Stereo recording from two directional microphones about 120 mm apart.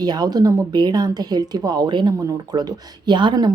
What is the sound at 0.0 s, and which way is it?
Speech, 35° right (ahead or behind).